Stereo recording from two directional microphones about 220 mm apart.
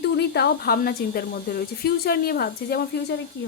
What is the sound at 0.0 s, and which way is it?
A woman's voice, 50° left (ahead or behind).